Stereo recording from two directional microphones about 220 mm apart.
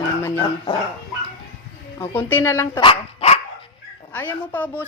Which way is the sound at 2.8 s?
25° left (ahead or behind).